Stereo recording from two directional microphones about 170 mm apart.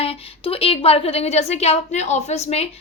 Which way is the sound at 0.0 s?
35° left (ahead or behind).